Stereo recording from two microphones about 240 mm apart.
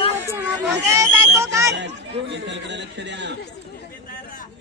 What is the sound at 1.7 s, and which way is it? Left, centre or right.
Speech, right.